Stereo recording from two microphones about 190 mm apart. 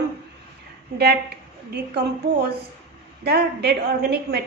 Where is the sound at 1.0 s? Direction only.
60° right (ahead or behind).